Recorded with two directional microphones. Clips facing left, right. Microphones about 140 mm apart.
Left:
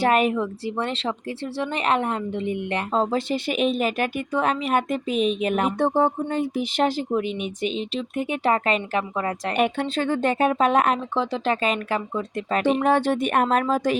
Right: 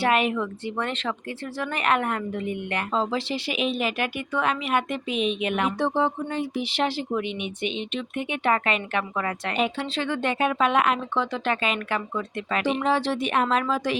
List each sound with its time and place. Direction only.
0.0 s speech: 40° left (ahead or behind)
2.9 s speech: 45° left (ahead or behind)
9.6 s speech: 50° left (ahead or behind)
12.8 s speech: 50° left (ahead or behind)